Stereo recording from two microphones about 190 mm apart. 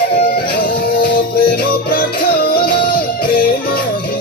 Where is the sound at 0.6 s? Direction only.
50° left (ahead or behind).